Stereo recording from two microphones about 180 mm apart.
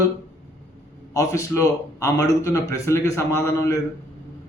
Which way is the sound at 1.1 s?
15° left (ahead or behind).